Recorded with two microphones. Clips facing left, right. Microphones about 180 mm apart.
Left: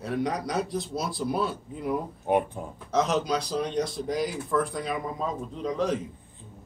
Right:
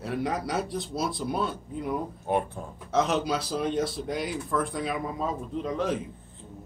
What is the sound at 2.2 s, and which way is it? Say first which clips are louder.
Speech: left 3 dB; 15° left (ahead or behind).